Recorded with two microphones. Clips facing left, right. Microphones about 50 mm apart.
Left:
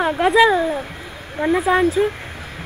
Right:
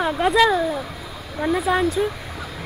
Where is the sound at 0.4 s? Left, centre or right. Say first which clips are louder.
Left 3 dB; left.